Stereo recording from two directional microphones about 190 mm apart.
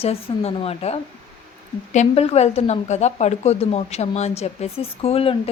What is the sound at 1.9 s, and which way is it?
A woman's voice, 30° left (ahead or behind).